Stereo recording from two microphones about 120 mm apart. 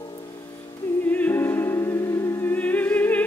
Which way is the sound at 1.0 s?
15° left (ahead or behind).